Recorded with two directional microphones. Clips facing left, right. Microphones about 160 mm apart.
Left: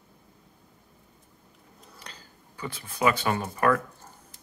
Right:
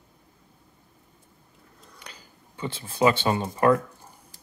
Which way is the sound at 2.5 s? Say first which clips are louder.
Right 5 dB; 25° right (ahead or behind).